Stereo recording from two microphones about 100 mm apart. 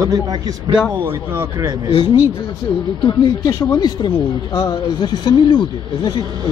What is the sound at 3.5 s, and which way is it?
Speech, 35° left (ahead or behind).